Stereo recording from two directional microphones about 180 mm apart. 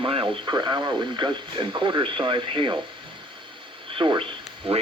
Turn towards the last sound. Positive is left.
turn(degrees=-30)  # may be behind; listen again after turning